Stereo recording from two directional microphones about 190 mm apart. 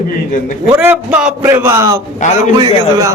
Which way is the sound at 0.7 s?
10° right (ahead or behind).